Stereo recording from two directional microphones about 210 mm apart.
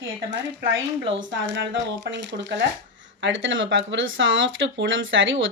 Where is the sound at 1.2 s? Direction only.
60° right (ahead or behind).